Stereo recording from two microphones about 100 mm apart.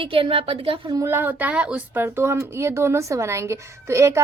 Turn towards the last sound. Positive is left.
turn(degrees=-30)  # may be behind; listen again after turning